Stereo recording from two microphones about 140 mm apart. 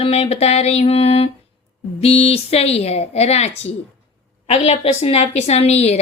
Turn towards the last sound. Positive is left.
turn(degrees=50)  # may be behind; listen again after turning